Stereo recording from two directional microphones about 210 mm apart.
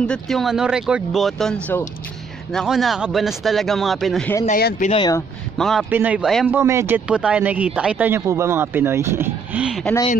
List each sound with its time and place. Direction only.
0.0 s speech: 5° left (ahead or behind)
4.5 s speech: 45° left (ahead or behind)
4.8 s speech: 25° left (ahead or behind)
5.6 s a man's voice: centre (ahead or behind)